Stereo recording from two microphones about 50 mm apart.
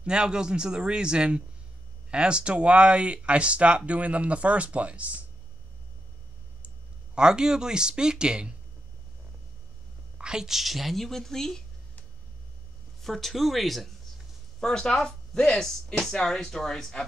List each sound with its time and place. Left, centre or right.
0.0 s speech: centre
7.2 s speech: centre
10.1 s a woman's voice: centre
13.0 s a woman's voice: centre
14.6 s speech: centre